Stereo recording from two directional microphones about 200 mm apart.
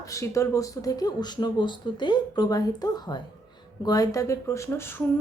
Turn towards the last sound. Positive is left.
turn(degrees=10)  # may be behind; listen again after turning